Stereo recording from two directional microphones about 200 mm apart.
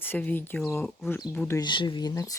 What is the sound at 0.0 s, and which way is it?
Speech, 10° left (ahead or behind).